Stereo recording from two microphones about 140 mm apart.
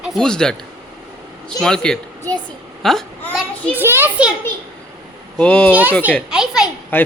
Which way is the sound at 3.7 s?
15° right (ahead or behind).